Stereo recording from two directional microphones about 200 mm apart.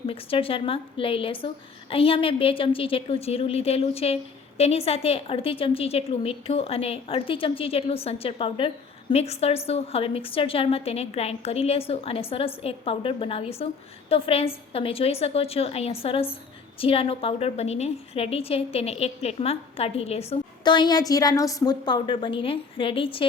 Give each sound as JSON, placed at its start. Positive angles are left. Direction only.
{"t": 0.1, "sound": "a woman's voice", "side_deg": 25}